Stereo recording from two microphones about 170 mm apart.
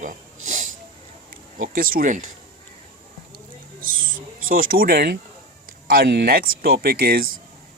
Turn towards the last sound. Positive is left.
turn(degrees=-60)  # may be behind; listen again after turning